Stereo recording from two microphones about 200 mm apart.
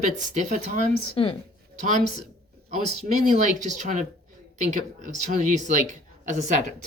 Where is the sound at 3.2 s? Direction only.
40° right (ahead or behind).